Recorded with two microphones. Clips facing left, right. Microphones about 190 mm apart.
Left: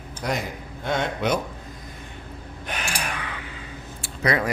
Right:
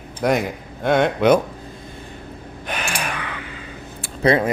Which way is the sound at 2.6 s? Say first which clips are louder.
Right 4 dB; 70° right (ahead or behind).